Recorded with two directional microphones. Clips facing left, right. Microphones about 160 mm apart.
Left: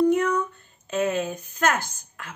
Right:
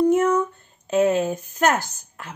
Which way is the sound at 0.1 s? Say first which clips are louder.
Right 4 dB; 45° right (ahead or behind).